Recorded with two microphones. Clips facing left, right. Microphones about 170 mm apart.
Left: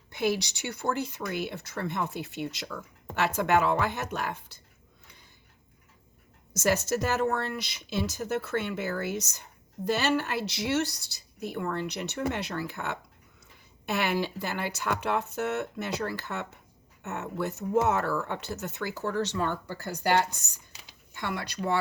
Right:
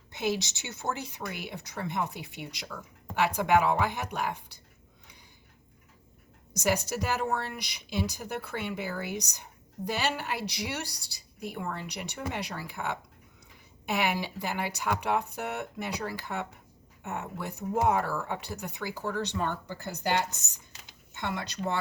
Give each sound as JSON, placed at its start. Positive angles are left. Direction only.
{"t": 0.1, "sound": "speech", "side_deg": -20}
{"t": 6.5, "sound": "speech", "side_deg": -15}
{"t": 21.1, "sound": "speech", "side_deg": -20}